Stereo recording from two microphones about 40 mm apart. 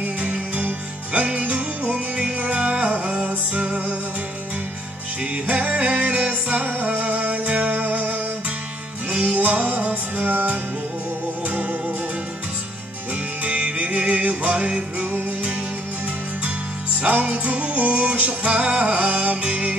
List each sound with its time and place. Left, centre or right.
0.0 s music: right
5.5 s music: right
9.2 s music: right
13.4 s music: right
17.0 s music: right
19.4 s music: right